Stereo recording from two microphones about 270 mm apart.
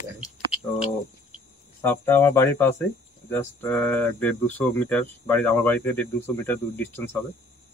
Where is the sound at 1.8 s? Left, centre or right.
Centre.